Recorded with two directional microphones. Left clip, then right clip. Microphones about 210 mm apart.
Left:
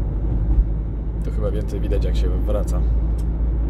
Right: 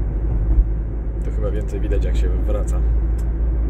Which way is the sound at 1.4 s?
10° left (ahead or behind).